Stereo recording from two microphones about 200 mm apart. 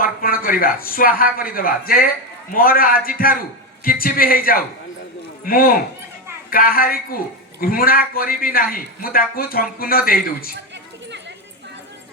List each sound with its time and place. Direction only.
0.0 s a man's voice: 45° left (ahead or behind)